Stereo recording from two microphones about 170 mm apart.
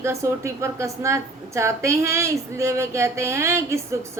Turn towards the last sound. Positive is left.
turn(degrees=-15)  # may be behind; listen again after turning